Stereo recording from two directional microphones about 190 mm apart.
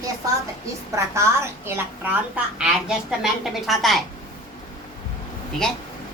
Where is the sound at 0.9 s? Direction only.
15° right (ahead or behind); by 4.0 s centre (ahead or behind).